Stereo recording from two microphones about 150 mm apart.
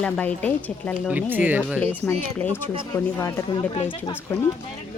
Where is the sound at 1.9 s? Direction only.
10° left (ahead or behind).